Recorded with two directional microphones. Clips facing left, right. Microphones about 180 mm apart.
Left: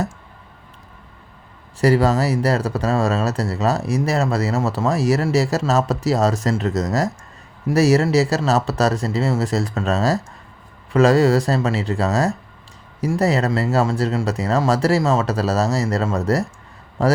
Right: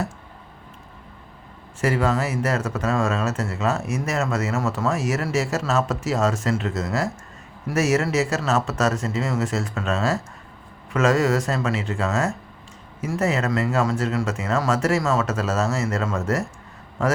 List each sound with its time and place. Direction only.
1.8 s speech: 35° left (ahead or behind)